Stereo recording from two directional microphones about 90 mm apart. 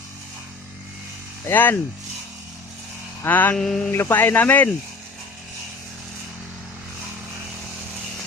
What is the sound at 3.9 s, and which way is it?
Speech, 25° left (ahead or behind).